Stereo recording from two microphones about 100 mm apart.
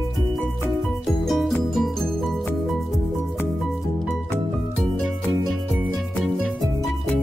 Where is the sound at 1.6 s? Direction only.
Centre (ahead or behind).